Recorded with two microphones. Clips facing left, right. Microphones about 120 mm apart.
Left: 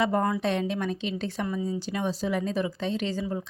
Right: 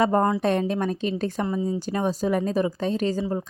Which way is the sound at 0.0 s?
40° right (ahead or behind).